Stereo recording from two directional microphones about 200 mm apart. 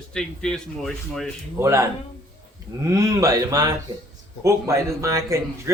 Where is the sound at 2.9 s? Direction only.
15° right (ahead or behind).